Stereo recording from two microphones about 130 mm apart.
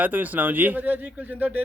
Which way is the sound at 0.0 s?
15° right (ahead or behind).